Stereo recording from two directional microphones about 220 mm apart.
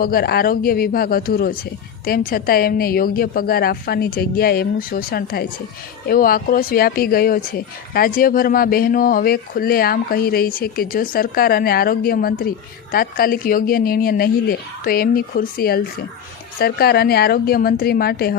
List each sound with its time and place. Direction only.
0.0 s a woman's voice: 45° left (ahead or behind)